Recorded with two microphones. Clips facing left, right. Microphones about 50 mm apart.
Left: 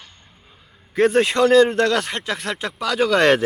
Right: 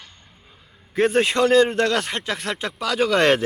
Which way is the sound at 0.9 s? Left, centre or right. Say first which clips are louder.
Left 2 dB; centre.